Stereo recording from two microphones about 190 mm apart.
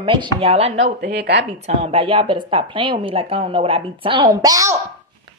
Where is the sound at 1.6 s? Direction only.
30° right (ahead or behind).